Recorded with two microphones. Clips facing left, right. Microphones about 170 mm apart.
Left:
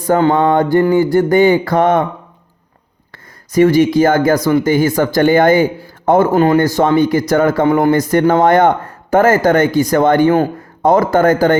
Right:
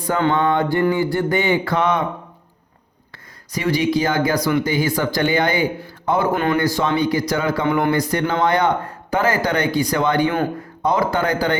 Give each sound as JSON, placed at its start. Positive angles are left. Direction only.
{"t": 0.0, "sound": "speech", "side_deg": 45}
{"t": 3.5, "sound": "speech", "side_deg": 50}
{"t": 6.3, "sound": "speech", "side_deg": 35}
{"t": 6.6, "sound": "speech", "side_deg": 45}